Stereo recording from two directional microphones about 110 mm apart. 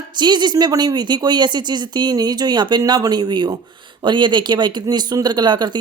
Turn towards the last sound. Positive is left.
turn(degrees=-40)  # may be behind; listen again after turning